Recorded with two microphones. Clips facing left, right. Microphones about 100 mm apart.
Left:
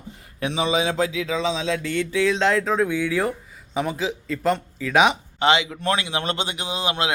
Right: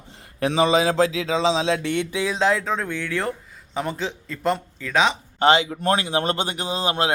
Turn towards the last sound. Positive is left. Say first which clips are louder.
# right 2 dB
turn(degrees=-40)  # may be behind; listen again after turning